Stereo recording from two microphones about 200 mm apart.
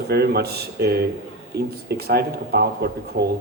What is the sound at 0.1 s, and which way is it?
Speech, 50° right (ahead or behind).